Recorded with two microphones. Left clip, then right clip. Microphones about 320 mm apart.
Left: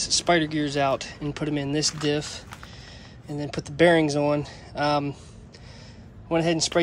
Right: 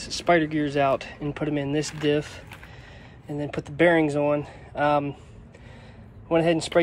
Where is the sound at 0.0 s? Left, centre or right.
Centre.